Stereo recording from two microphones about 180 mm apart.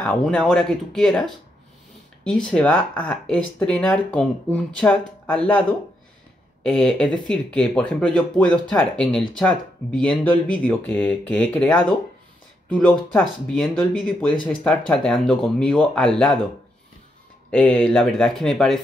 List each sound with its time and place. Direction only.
0.0 s speech: 5° left (ahead or behind)
17.5 s speech: 5° left (ahead or behind)